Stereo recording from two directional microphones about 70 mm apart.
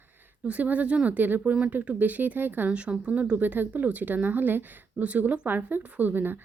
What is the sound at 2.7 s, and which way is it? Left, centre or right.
Speech, centre.